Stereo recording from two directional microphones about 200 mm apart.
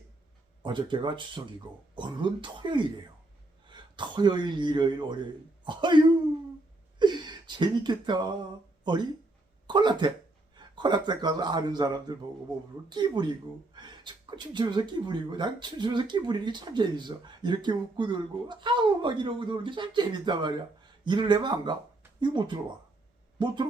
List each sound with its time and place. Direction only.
0.6 s a man's voice: 25° right (ahead or behind)
7.0 s speech: 20° right (ahead or behind)